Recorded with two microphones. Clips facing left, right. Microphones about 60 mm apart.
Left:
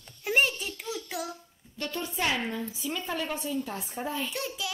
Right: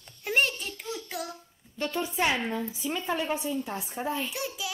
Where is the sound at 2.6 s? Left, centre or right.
Centre.